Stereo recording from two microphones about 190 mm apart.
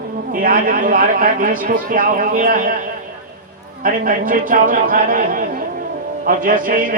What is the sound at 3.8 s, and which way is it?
Music, 45° right (ahead or behind).